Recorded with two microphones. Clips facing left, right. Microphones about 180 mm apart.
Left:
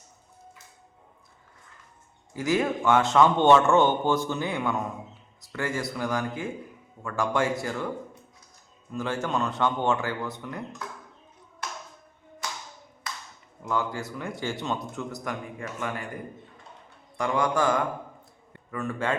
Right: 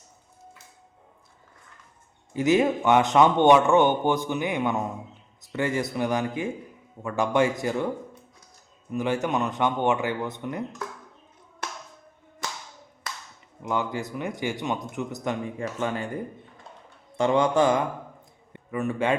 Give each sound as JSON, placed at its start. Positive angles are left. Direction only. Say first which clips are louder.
{"t": 2.3, "sound": "a man's voice", "louder": "right 4 dB", "side_deg": -20}
{"t": 8.9, "sound": "a man's voice", "louder": "right 3 dB", "side_deg": -20}
{"t": 13.7, "sound": "a man's voice", "louder": "right 1 dB", "side_deg": -20}
{"t": 17.2, "sound": "speech", "louder": "right 5 dB", "side_deg": -25}